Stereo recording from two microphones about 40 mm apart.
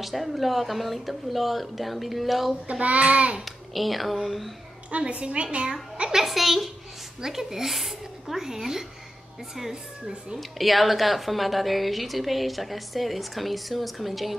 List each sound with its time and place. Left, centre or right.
0.0 s a woman's voice: centre
2.8 s a child's voice: right
3.4 s a woman's voice: centre
4.9 s a woman's voice: right; by 8.8 s centre
10.6 s a woman's voice: centre